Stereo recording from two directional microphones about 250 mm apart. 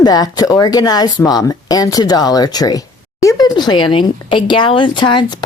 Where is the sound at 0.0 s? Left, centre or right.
Centre.